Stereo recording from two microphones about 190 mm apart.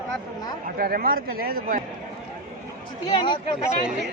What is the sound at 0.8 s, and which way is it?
A man's voice, 50° right (ahead or behind).